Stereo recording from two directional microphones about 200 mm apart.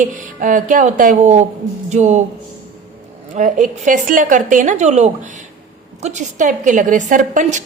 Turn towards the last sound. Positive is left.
turn(degrees=-40)  # may be behind; listen again after turning